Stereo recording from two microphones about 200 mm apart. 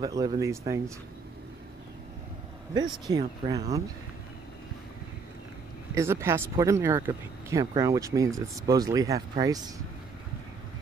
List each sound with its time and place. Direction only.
0.0 s speech: 20° right (ahead or behind)
2.7 s speech: 20° right (ahead or behind)
5.9 s speech: 15° right (ahead or behind)